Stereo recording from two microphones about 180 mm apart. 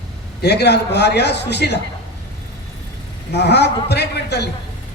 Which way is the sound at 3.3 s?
65° left (ahead or behind).